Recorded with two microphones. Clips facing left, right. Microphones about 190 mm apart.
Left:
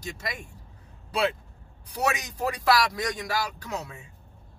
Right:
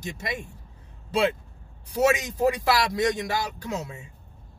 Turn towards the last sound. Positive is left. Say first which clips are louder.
# right 2 dB
turn(degrees=-25)  # may be behind; listen again after turning